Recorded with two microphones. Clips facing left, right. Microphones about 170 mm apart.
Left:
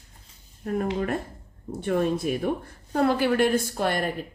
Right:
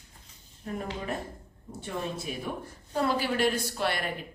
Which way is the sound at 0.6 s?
55° left (ahead or behind).